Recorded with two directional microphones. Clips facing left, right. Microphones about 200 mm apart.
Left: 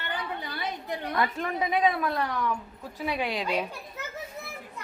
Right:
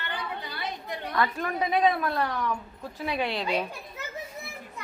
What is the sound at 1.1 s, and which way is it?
A woman's voice, 20° left (ahead or behind).